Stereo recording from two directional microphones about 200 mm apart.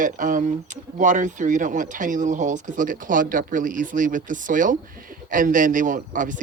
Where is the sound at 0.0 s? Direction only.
40° right (ahead or behind).